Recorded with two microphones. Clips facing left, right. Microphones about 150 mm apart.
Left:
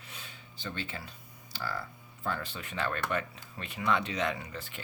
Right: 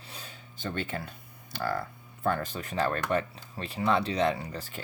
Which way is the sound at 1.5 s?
50° right (ahead or behind).